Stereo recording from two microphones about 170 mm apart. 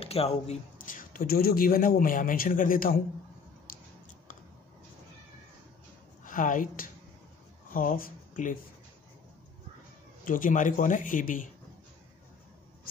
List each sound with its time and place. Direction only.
0.0 s speech: 35° left (ahead or behind)
0.7 s a man's voice: 50° left (ahead or behind)
6.2 s a woman's voice: 50° left (ahead or behind)
10.2 s speech: 50° left (ahead or behind)